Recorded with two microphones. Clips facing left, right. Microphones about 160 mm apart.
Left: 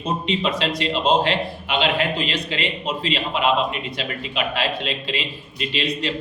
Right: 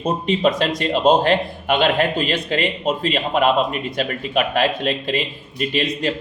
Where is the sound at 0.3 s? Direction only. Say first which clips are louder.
Right 6 dB; 50° right (ahead or behind).